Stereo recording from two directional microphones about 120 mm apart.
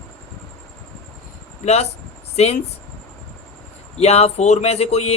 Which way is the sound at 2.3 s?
60° left (ahead or behind).